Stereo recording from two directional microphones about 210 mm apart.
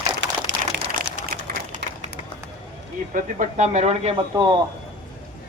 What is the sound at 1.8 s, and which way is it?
Run, 50° right (ahead or behind).